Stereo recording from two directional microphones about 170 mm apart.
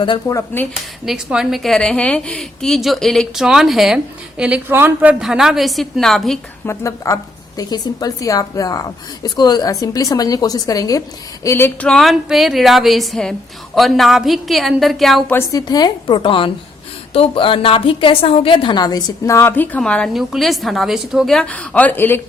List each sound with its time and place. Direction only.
0.0 s a woman's voice: 25° left (ahead or behind)
1.0 s a woman's voice: 5° right (ahead or behind)
6.7 s a woman's voice: 15° left (ahead or behind); by 15.4 s centre (ahead or behind)
15.4 s a woman's voice: 20° left (ahead or behind)